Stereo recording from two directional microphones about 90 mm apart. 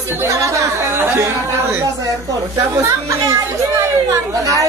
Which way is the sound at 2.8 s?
35° right (ahead or behind).